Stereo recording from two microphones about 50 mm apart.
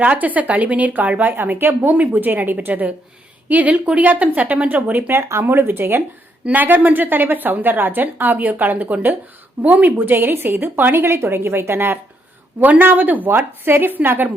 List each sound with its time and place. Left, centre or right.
0.0 s speech: right
5.1 s a woman's voice: right
6.4 s speech: right
10.2 s a woman's voice: right
12.5 s speech: right